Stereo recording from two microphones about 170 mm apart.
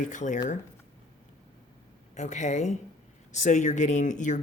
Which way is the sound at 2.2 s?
45° left (ahead or behind).